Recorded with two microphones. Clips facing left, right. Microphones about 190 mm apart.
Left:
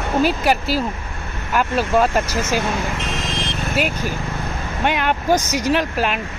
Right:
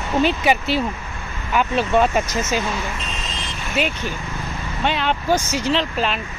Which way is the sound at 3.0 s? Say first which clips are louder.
Left 6 dB; 85° left.